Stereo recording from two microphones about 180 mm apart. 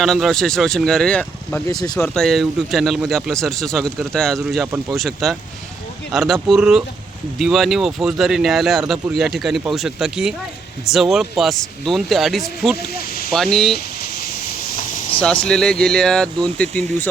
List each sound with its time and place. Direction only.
0.0 s speech: centre (ahead or behind)
1.7 s speech: 20° left (ahead or behind)
2.1 s speech: centre (ahead or behind)
15.2 s speech: 5° left (ahead or behind)